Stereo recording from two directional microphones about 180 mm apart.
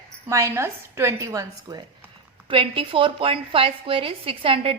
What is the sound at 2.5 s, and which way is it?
A woman's voice, 30° right (ahead or behind).